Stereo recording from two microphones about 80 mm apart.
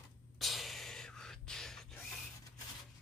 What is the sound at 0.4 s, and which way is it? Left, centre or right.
Gasp, centre.